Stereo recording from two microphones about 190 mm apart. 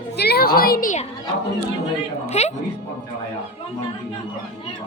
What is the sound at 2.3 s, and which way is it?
Speech, 35° left (ahead or behind).